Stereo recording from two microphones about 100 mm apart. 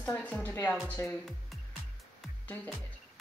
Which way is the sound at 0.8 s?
20° left (ahead or behind).